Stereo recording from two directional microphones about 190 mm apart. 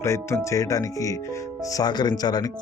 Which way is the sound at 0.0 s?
15° left (ahead or behind).